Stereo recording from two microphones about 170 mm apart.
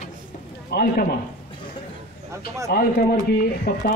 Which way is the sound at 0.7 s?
70° left (ahead or behind).